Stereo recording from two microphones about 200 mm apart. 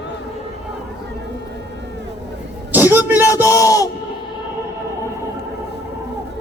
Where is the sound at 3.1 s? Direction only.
10° right (ahead or behind).